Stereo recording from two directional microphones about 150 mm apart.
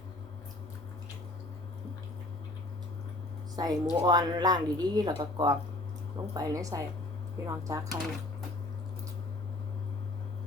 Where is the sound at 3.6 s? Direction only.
30° right (ahead or behind).